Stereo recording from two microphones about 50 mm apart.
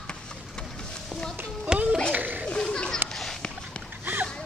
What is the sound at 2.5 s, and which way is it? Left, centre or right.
Children playing, centre.